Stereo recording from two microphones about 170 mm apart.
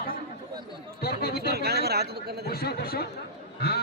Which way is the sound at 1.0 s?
70° left (ahead or behind).